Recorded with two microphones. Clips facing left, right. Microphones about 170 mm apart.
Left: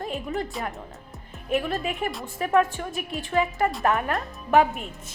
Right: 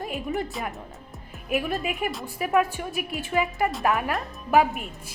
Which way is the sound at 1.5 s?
15° right (ahead or behind).